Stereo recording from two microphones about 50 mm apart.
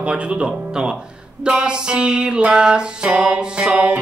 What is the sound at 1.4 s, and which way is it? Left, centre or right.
Music, centre.